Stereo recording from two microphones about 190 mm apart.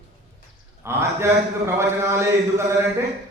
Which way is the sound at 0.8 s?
15° right (ahead or behind).